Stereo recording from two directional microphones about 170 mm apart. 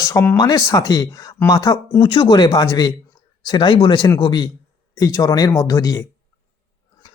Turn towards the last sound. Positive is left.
turn(degrees=20)  # may be behind; listen again after turning